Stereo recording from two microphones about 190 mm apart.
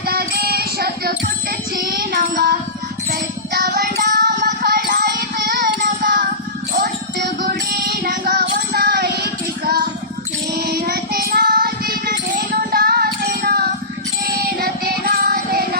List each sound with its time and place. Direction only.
0.1 s music: 55° right (ahead or behind)
10.5 s child singing: 60° right (ahead or behind)
14.3 s music: 55° right (ahead or behind)